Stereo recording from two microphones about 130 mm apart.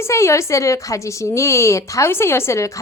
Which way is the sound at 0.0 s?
20° left (ahead or behind).